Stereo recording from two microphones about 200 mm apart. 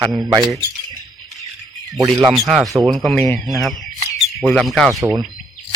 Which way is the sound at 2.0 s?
15° right (ahead or behind).